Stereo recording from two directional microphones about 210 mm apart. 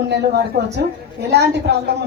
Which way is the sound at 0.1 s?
50° right (ahead or behind).